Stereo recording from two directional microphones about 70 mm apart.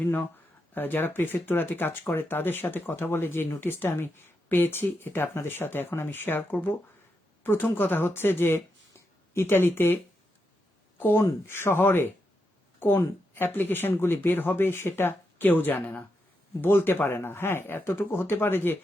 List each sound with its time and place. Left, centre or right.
0.7 s speech: left
11.4 s speech: left; by 16.0 s centre
16.6 s speech: left